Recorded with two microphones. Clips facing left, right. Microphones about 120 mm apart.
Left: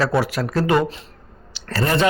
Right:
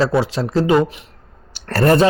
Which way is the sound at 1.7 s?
55° right (ahead or behind).